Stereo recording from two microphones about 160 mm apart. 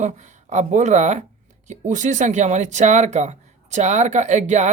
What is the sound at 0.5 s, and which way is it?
Speech, 50° right (ahead or behind).